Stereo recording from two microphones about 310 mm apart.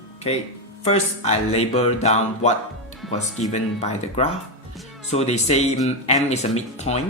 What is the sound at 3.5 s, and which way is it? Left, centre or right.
Speech, left.